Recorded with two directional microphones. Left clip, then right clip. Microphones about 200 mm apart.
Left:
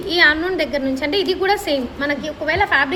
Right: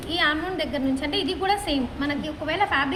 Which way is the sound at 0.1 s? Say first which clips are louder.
Left 9 dB; 45° left (ahead or behind).